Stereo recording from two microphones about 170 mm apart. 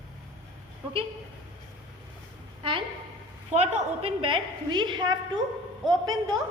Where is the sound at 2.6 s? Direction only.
30° right (ahead or behind).